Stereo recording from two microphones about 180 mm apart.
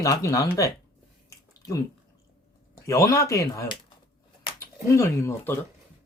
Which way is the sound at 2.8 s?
15° left (ahead or behind).